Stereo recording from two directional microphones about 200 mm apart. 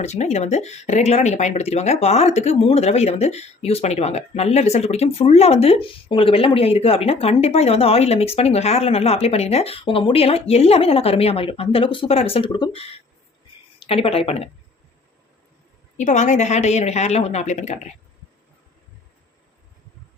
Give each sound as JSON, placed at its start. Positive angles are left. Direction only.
{"t": 0.0, "sound": "speech", "side_deg": 35}
{"t": 16.0, "sound": "speech", "side_deg": 35}